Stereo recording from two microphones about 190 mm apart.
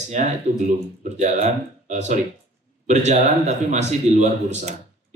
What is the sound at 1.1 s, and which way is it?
Speech, 35° right (ahead or behind).